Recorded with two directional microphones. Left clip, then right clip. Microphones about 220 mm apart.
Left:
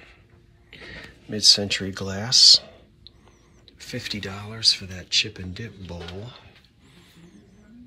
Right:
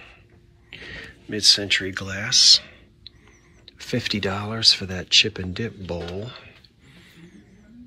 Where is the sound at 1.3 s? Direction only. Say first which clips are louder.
Even; 20° left (ahead or behind).